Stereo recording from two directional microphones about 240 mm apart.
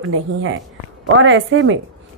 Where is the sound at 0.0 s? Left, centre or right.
Right.